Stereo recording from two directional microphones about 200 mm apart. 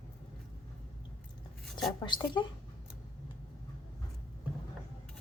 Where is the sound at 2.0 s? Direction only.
25° left (ahead or behind).